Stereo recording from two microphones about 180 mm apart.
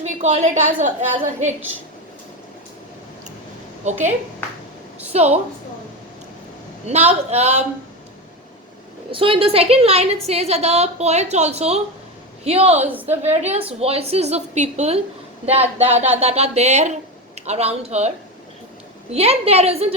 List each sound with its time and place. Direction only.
0.0 s a woman's voice: 40° right (ahead or behind)
3.8 s a woman's voice: 40° right (ahead or behind)
5.1 s a woman's voice: 35° right (ahead or behind)
6.8 s a woman's voice: 40° right (ahead or behind)
9.1 s a woman's voice: 30° right (ahead or behind)
12.8 s a woman's voice: 10° right (ahead or behind)
13.3 s a woman's voice: 35° right (ahead or behind)
19.1 s a woman's voice: 35° right (ahead or behind)